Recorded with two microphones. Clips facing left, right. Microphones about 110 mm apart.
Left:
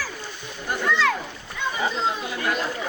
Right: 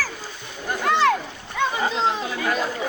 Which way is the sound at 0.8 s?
60° right (ahead or behind).